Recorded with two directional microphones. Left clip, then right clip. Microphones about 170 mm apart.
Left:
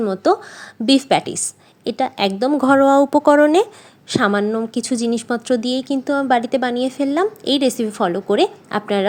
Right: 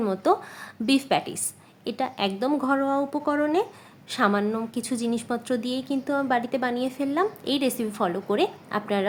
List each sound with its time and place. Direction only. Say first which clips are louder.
0.0 s a woman's voice: left 6 dB; 30° left (ahead or behind)
2.6 s speech: left 15 dB; 50° left (ahead or behind)
4.1 s a woman's voice: left 6 dB; 35° left (ahead or behind)